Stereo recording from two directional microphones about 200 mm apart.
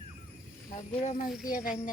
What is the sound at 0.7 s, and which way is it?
Speech, 40° left (ahead or behind).